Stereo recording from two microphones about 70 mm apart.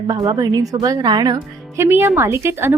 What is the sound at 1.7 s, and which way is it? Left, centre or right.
Speech, right.